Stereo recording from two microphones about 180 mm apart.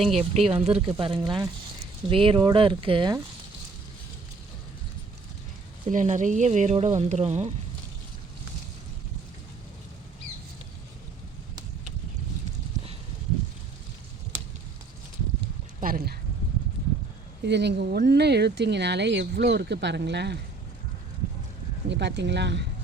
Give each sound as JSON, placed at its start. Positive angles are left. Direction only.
{"t": 0.2, "sound": "speech", "side_deg": -35}
{"t": 5.9, "sound": "speech", "side_deg": -45}
{"t": 15.8, "sound": "a sound", "side_deg": -55}
{"t": 17.4, "sound": "speech", "side_deg": -70}
{"t": 21.8, "sound": "speech", "side_deg": -75}